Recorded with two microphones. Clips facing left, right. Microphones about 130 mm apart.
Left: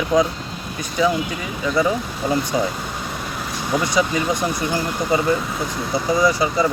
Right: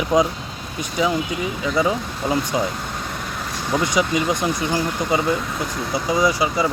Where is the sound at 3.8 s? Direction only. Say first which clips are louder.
Right 1 dB; 15° right (ahead or behind).